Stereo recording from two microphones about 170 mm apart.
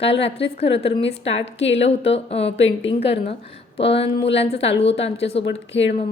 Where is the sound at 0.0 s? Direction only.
35° left (ahead or behind).